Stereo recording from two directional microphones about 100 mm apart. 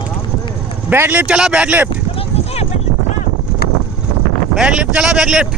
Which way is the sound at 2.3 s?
90° left.